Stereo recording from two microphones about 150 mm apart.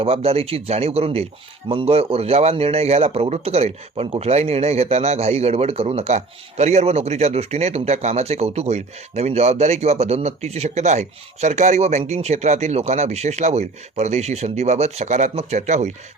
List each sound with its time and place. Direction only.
0.0 s speech: 40° right (ahead or behind)